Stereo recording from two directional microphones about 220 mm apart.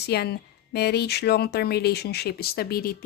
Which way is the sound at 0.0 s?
45° left (ahead or behind).